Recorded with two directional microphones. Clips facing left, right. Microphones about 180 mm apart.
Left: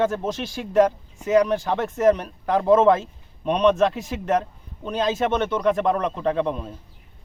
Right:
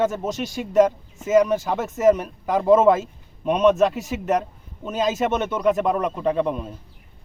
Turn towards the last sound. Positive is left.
turn(degrees=-5)  # may be behind; listen again after turning